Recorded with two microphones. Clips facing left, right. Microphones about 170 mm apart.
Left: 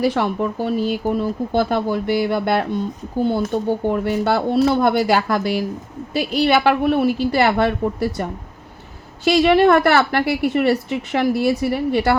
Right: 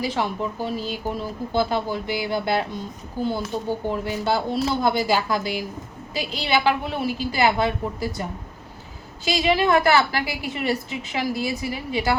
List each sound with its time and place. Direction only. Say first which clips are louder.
0.0 s a woman's voice: left 6 dB; 60° left (ahead or behind)